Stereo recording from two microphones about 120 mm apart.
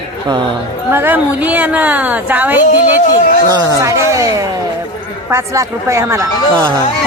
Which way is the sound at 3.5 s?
30° right (ahead or behind).